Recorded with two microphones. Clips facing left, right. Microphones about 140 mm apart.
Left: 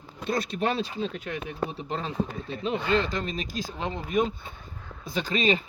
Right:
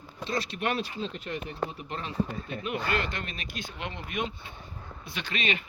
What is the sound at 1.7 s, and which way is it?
Speech, 30° left (ahead or behind).